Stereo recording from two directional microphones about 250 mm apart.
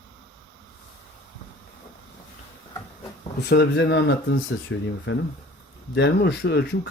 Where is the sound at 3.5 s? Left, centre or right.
Left.